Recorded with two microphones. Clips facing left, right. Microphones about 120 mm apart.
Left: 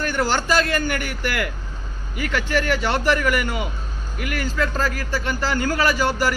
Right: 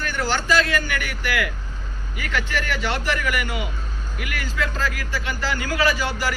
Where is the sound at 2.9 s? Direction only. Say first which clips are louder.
Left 5 dB; 45° left (ahead or behind).